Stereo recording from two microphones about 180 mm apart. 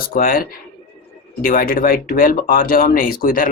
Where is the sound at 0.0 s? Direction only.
50° left (ahead or behind).